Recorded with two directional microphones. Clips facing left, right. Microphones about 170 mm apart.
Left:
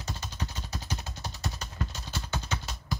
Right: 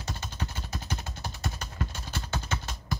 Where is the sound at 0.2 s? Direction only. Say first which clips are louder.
Right 1 dB; 50° right (ahead or behind).